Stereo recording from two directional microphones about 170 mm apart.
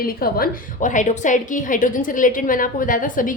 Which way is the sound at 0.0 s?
60° left (ahead or behind).